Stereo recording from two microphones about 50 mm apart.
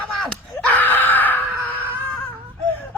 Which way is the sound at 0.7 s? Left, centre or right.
Left.